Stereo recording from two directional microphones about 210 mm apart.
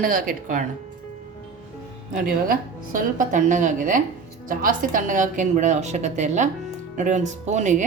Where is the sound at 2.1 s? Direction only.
40° right (ahead or behind).